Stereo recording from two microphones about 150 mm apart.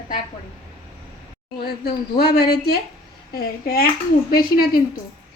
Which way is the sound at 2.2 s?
90° left.